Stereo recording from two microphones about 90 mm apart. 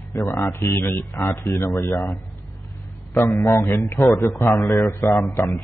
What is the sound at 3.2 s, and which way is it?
A man's voice, 35° left (ahead or behind).